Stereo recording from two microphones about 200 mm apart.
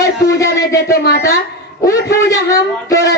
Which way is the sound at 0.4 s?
60° left (ahead or behind).